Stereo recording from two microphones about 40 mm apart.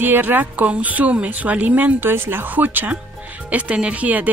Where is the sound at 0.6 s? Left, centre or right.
Right.